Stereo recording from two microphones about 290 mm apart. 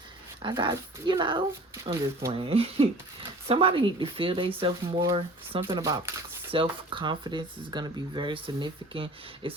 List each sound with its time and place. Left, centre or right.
0.4 s speech: centre